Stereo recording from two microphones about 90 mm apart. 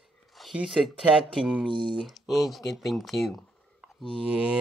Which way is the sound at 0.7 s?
Centre (ahead or behind).